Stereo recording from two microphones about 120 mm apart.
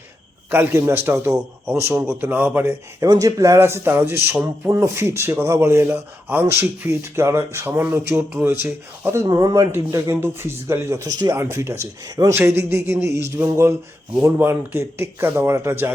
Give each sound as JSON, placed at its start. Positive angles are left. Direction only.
{"t": 0.5, "sound": "speech", "side_deg": -20}
{"t": 3.0, "sound": "speech", "side_deg": -25}
{"t": 12.5, "sound": "speech", "side_deg": -20}